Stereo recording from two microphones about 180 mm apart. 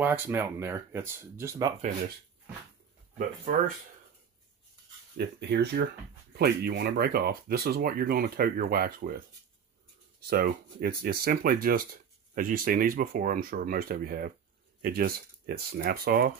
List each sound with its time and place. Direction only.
0.0 s speech: 10° right (ahead or behind)
3.2 s speech: 50° right (ahead or behind)
5.1 s speech: 65° right (ahead or behind)
10.3 s speech: 55° right (ahead or behind)